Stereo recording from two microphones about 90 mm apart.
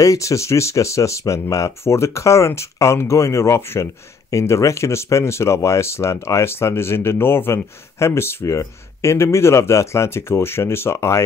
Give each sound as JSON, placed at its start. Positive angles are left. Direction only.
{"t": 0.0, "sound": "speech", "side_deg": 40}